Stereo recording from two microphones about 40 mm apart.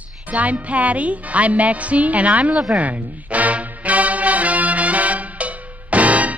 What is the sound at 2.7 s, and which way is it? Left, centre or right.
Music, right.